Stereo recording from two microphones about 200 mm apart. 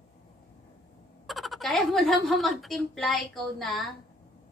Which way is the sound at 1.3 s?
Centre (ahead or behind).